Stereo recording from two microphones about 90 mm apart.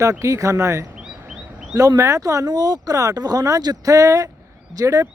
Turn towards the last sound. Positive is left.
turn(degrees=-35)  # may be behind; listen again after turning